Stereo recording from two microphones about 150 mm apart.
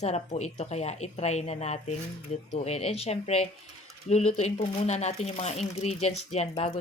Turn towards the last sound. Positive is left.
turn(degrees=45)  # may be behind; listen again after turning